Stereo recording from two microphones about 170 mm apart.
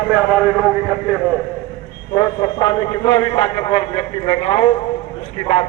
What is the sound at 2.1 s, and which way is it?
A man's voice, 25° left (ahead or behind).